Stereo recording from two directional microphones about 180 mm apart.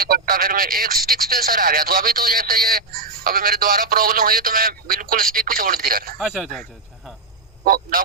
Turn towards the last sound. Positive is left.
turn(degrees=-55)  # may be behind; listen again after turning